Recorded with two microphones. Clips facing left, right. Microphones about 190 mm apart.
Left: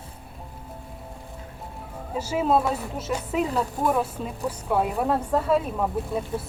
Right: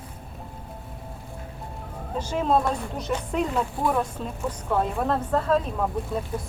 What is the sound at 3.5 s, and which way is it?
Speech, 35° left (ahead or behind).